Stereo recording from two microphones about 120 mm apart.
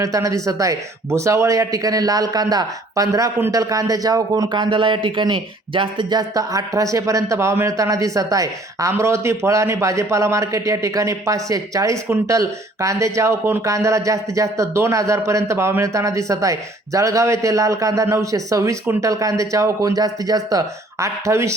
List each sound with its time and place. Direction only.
0.0 s speech: 30° right (ahead or behind)